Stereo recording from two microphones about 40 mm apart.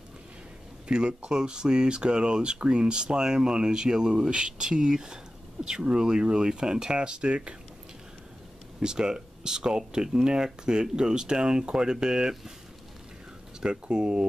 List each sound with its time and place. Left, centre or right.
0.8 s speech: right
8.7 s speech: centre
13.6 s speech: right